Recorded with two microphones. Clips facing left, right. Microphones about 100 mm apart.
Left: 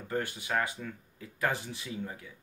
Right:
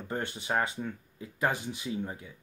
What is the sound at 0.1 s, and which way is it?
Speech, 25° right (ahead or behind).